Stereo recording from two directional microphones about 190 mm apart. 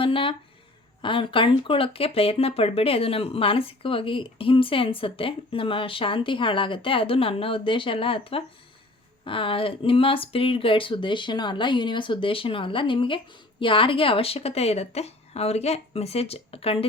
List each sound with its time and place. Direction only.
0.0 s speech: 30° left (ahead or behind)